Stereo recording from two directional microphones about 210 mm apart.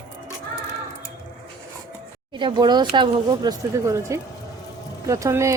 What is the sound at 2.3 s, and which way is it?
Speech, 20° right (ahead or behind).